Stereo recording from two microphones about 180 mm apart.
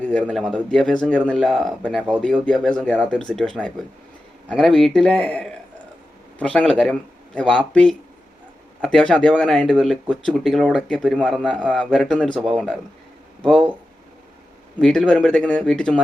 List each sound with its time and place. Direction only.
0.0 s a man's voice: 5° left (ahead or behind)
14.8 s speech: 5° left (ahead or behind)